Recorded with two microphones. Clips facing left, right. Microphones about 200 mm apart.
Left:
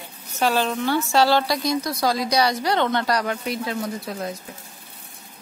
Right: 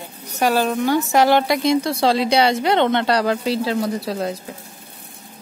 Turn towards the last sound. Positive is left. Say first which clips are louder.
# right 6 dB
turn(degrees=-35)  # may be behind; listen again after turning